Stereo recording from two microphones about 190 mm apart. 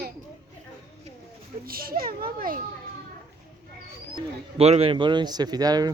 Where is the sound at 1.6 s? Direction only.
50° right (ahead or behind).